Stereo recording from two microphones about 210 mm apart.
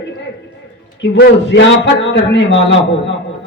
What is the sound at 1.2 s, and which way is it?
A man's voice, 60° left (ahead or behind).